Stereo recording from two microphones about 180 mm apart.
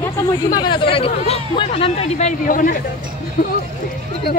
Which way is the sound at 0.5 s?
25° left (ahead or behind).